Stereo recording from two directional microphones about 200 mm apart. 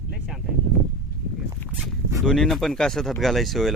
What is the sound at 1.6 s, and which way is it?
Dog, 10° left (ahead or behind).